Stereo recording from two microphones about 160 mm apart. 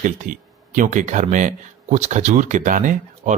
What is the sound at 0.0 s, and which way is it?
Speech, 55° right (ahead or behind).